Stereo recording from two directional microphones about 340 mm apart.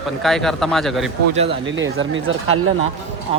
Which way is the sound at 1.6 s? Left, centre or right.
Right.